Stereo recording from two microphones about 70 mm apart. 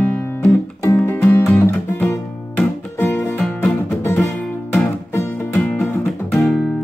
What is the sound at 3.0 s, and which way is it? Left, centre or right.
Music, left.